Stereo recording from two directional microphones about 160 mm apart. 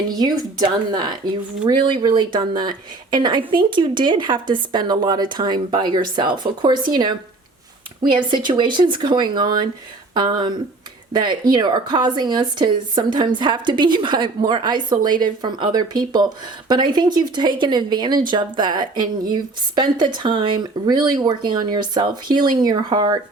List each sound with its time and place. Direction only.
0.1 s speech: 25° right (ahead or behind)